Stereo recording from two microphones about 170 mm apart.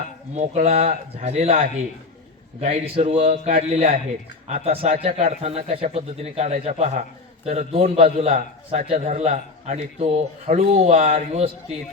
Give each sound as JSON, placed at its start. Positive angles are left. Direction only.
{"t": 0.3, "sound": "a man's voice", "side_deg": -40}